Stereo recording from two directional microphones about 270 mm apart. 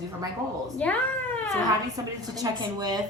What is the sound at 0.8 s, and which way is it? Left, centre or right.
Speech, centre.